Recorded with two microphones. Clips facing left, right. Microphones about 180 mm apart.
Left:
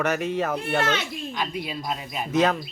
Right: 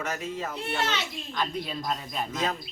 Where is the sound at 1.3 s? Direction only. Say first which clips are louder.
Right 1 dB; 10° left (ahead or behind).